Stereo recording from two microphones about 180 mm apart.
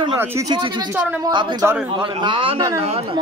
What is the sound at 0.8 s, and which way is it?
Speech, 15° right (ahead or behind).